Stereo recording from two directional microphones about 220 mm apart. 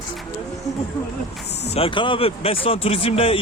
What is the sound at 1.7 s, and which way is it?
Speech, 25° left (ahead or behind).